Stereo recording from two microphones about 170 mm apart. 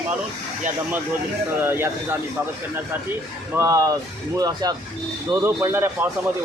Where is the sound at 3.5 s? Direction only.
15° right (ahead or behind).